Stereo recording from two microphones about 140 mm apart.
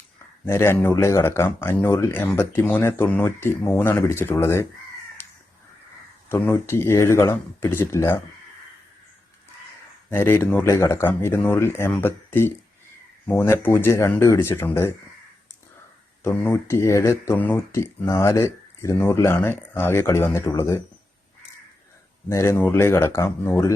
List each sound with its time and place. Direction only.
0.4 s speech: 20° left (ahead or behind)
5.2 s crow: 15° left (ahead or behind)
6.2 s speech: 20° left (ahead or behind)
10.1 s speech: 15° left (ahead or behind)
16.2 s speech: 15° left (ahead or behind)
22.3 s speech: 20° left (ahead or behind)